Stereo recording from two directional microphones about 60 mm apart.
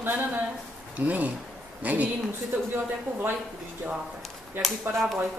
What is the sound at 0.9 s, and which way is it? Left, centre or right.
A woman's voice, right.